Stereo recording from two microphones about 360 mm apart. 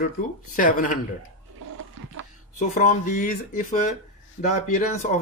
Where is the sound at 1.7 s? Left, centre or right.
Right.